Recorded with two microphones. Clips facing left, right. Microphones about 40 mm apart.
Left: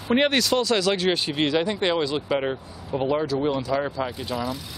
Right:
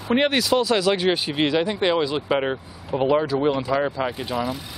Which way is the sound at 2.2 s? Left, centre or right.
Centre.